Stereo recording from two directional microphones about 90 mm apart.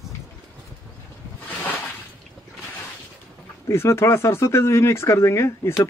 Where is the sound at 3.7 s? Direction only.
30° left (ahead or behind).